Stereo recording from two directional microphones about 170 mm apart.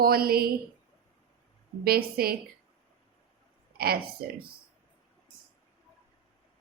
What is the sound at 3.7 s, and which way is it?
Speech, 65° right (ahead or behind).